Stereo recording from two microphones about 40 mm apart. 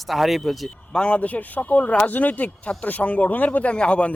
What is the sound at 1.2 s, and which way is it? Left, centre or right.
Speech, left.